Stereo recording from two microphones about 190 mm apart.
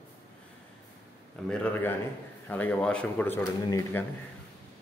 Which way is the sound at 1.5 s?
5° left (ahead or behind).